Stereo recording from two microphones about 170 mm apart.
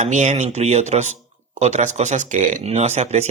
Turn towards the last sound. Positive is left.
turn(degrees=-40)  # may be behind; listen again after turning